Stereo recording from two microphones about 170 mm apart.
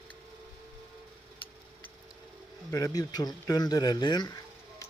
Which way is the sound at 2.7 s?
20° left (ahead or behind).